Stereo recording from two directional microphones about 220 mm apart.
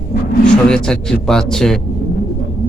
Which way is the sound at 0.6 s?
5° left (ahead or behind).